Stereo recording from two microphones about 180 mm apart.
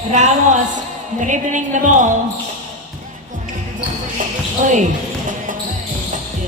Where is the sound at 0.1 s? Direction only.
40° right (ahead or behind).